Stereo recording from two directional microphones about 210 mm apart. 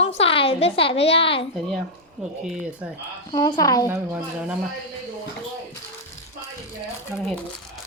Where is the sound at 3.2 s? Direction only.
20° left (ahead or behind).